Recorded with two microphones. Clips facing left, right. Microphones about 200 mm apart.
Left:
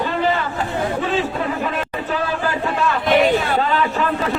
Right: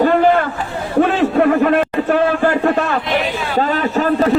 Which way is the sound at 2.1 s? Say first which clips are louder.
Right 7 dB; 55° right (ahead or behind).